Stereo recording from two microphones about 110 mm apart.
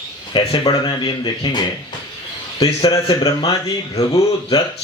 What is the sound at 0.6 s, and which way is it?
Speech, 40° left (ahead or behind).